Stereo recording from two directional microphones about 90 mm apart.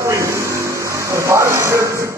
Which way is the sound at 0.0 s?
35° right (ahead or behind).